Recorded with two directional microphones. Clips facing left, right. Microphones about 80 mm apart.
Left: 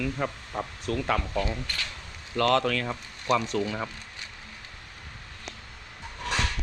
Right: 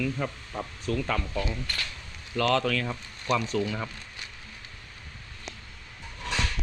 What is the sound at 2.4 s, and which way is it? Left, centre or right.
Speech, left.